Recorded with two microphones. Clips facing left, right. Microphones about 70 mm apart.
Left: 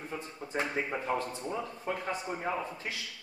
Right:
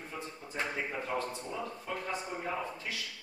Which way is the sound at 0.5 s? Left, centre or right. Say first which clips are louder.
Left 3 dB; left.